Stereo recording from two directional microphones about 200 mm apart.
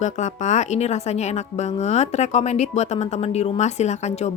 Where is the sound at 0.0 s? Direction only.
35° left (ahead or behind).